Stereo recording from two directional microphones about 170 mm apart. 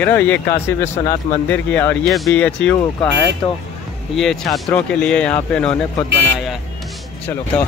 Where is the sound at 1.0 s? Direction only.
25° left (ahead or behind).